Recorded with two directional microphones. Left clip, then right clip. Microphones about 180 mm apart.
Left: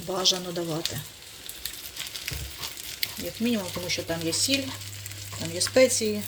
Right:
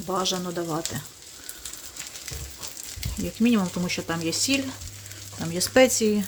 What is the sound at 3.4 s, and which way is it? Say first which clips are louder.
Speech: right 5 dB; 30° right (ahead or behind).